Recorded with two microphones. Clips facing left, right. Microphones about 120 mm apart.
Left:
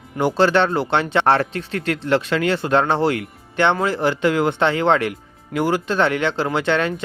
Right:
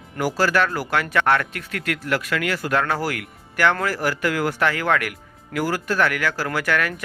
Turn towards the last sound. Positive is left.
turn(degrees=25)  # may be behind; listen again after turning